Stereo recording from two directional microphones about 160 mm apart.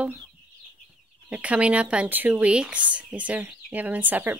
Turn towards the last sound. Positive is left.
turn(degrees=-10)  # may be behind; listen again after turning